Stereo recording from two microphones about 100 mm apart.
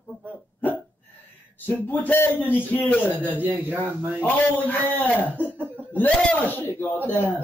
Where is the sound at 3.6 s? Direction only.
20° right (ahead or behind).